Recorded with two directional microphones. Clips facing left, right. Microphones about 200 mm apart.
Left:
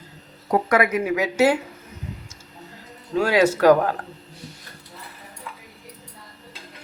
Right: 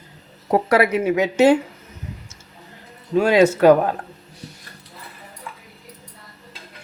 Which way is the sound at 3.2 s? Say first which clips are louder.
Right 4 dB; 20° right (ahead or behind).